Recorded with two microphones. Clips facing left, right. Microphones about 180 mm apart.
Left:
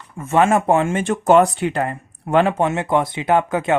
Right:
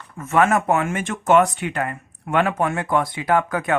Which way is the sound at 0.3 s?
25° left (ahead or behind).